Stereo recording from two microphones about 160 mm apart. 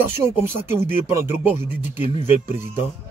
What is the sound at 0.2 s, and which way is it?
Speech, 15° right (ahead or behind).